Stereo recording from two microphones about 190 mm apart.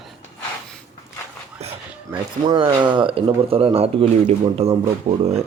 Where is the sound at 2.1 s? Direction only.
25° right (ahead or behind).